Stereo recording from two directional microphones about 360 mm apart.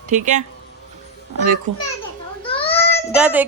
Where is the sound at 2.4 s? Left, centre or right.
Centre.